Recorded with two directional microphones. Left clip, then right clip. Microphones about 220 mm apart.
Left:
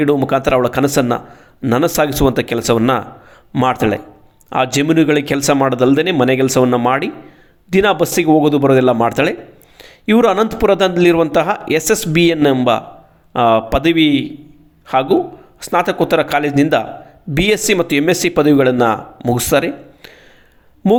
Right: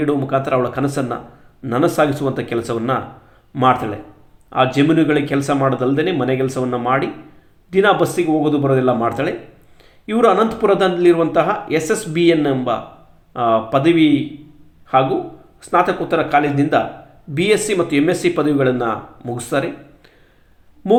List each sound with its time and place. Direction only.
0.0 s a woman's voice: 45° left (ahead or behind)